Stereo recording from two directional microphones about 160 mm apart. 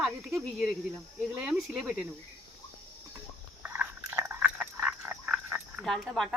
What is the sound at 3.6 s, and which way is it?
Frog, 15° right (ahead or behind).